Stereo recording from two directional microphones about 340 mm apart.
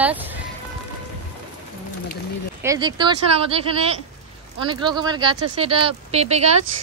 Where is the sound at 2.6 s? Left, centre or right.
Centre.